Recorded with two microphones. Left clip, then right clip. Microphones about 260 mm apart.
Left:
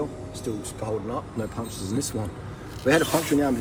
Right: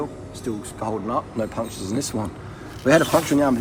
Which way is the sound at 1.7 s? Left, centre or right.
Left.